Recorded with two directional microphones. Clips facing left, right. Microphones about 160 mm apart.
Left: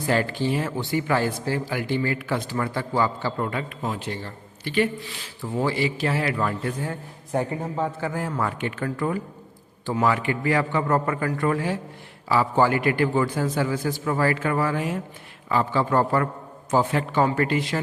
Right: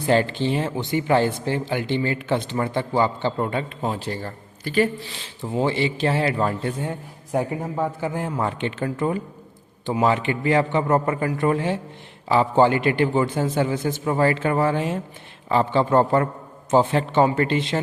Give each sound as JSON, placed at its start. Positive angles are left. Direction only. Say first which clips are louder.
{"t": 0.1, "sound": "speech", "louder": "right 3 dB", "side_deg": -25}
{"t": 5.2, "sound": "speech", "louder": "right 3 dB", "side_deg": -20}